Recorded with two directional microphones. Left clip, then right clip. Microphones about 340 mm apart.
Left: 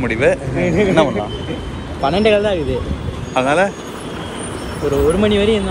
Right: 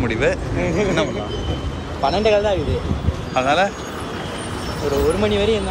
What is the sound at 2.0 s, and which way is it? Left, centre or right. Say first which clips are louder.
Speech: left 2 dB; left.